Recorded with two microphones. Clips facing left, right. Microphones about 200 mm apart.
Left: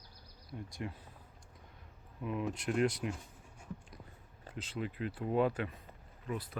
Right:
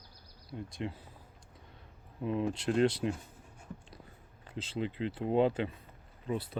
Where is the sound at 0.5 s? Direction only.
25° right (ahead or behind).